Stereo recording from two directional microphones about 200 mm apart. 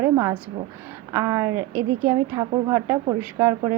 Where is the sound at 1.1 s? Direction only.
15° right (ahead or behind).